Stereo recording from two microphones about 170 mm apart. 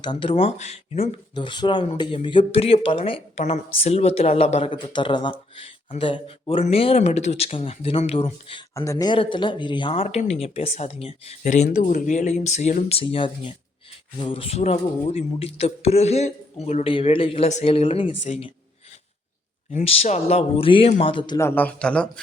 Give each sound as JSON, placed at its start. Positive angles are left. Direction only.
{"t": 0.0, "sound": "speech", "side_deg": 30}
{"t": 8.7, "sound": "speech", "side_deg": 20}
{"t": 18.2, "sound": "speech", "side_deg": 45}
{"t": 19.7, "sound": "speech", "side_deg": 35}
{"t": 21.4, "sound": "a man's voice", "side_deg": 10}